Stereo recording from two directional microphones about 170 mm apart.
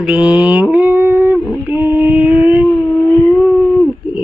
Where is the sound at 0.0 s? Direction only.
5° right (ahead or behind).